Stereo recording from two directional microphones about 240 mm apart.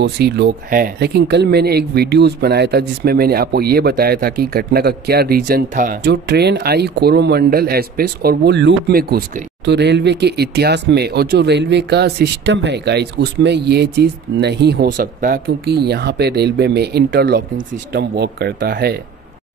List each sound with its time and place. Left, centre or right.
0.0 s speech: right